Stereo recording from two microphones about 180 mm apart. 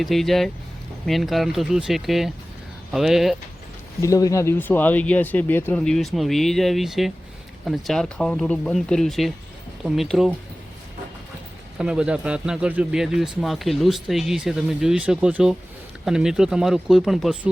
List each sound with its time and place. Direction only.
0.0 s speech: centre (ahead or behind)
4.0 s speech: 20° left (ahead or behind); by 10.3 s centre (ahead or behind)
11.8 s speech: 5° right (ahead or behind)